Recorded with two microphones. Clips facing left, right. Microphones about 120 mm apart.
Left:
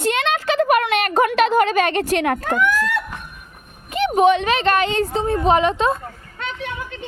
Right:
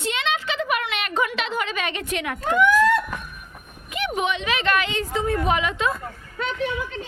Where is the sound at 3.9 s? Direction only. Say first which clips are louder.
Left 10 dB; 35° left (ahead or behind).